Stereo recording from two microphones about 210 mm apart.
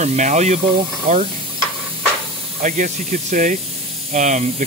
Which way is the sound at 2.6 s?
35° right (ahead or behind).